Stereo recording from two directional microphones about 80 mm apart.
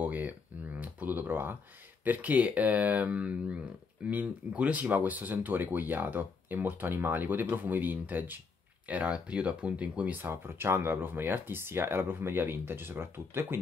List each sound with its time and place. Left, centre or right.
0.0 s a sound: right
2.0 s speech: centre
10.3 s speech: right